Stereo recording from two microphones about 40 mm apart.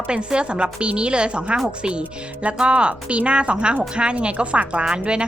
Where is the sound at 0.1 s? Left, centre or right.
Right.